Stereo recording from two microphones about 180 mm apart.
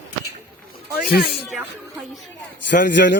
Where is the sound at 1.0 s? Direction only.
60° left (ahead or behind).